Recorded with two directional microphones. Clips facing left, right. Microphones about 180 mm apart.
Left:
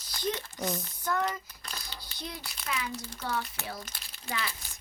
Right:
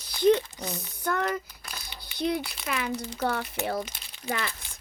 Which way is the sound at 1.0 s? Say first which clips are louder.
Right 4 dB; 65° right (ahead or behind).